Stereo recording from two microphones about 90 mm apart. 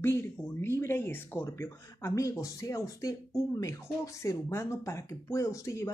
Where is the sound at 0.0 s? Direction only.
25° left (ahead or behind).